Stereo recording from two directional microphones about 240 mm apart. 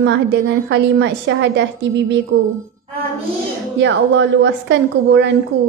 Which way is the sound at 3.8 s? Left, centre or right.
Right.